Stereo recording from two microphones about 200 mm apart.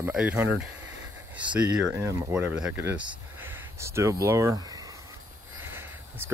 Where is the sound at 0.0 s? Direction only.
5° right (ahead or behind).